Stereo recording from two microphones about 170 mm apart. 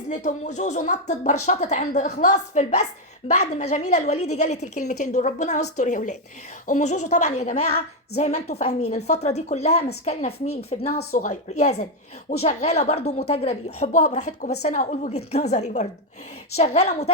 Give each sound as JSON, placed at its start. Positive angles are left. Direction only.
{"t": 0.1, "sound": "speech", "side_deg": 45}
{"t": 11.1, "sound": "speech", "side_deg": 50}